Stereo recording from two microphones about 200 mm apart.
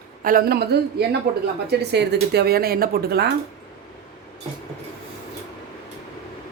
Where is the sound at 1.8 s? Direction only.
55° right (ahead or behind).